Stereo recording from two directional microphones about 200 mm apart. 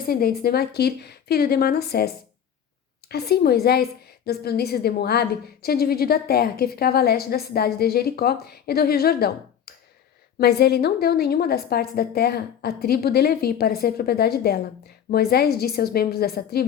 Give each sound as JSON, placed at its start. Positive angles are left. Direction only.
{"t": 0.0, "sound": "a woman's voice", "side_deg": 45}